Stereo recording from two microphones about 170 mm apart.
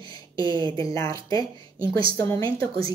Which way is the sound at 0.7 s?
20° left (ahead or behind).